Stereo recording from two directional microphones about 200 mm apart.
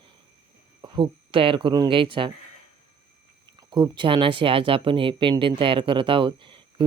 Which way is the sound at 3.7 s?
25° right (ahead or behind).